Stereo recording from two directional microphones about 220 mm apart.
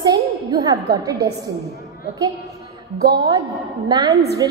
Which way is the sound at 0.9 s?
15° right (ahead or behind).